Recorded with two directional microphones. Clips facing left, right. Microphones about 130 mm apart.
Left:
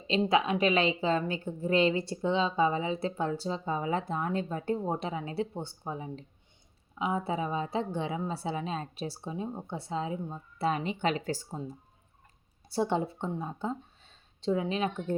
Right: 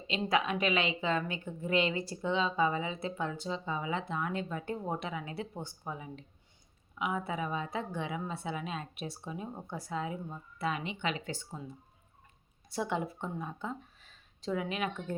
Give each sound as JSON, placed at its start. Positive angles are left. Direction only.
{"t": 0.3, "sound": "a woman's voice", "side_deg": 25}